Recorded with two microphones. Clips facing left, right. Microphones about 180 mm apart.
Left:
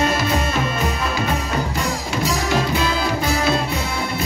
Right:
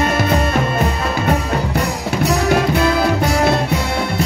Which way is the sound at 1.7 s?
65° right (ahead or behind).